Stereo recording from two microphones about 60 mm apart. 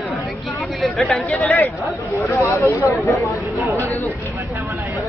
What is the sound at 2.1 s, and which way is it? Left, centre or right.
Speech, left.